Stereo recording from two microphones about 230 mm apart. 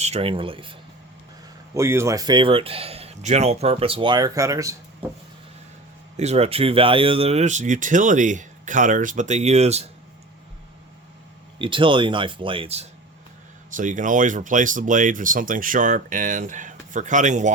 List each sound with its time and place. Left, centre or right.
0.0 s speech: right
1.7 s speech: centre
6.1 s speech: right
11.6 s speech: right